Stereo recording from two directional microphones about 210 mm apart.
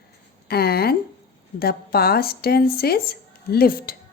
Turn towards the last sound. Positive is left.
turn(degrees=45)  # may be behind; listen again after turning